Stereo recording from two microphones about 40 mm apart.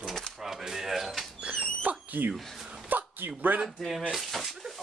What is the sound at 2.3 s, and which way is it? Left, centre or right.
Speech, centre.